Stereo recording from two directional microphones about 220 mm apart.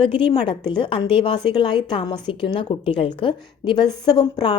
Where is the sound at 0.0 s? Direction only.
25° left (ahead or behind).